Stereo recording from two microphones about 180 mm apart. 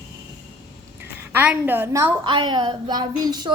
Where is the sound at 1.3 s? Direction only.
10° right (ahead or behind).